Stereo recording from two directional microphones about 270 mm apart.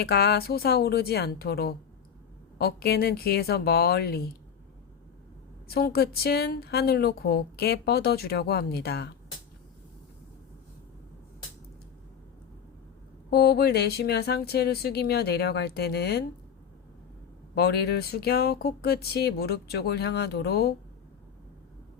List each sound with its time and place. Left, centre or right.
0.0 s speech: left
5.6 s speech: left
13.3 s speech: left
17.5 s speech: left